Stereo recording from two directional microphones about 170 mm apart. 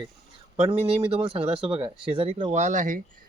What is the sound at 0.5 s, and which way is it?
Speech, 35° right (ahead or behind).